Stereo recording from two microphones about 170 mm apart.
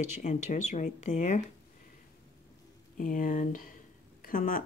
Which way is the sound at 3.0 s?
50° left (ahead or behind).